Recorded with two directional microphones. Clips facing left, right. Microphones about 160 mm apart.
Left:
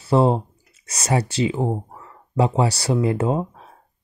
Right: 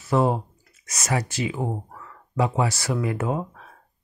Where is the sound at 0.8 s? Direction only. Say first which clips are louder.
Left 4 dB; 30° left (ahead or behind).